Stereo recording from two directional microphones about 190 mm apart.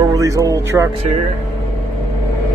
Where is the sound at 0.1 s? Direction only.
15° right (ahead or behind).